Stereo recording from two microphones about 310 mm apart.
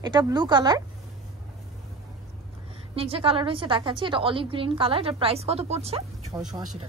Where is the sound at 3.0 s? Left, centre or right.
Centre.